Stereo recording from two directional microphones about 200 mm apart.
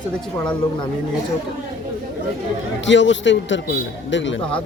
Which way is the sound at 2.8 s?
65° left (ahead or behind).